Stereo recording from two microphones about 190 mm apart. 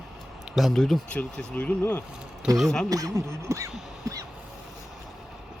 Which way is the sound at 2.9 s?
15° right (ahead or behind).